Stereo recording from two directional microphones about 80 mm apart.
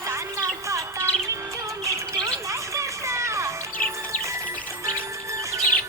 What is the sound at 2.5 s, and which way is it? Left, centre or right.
Music, right.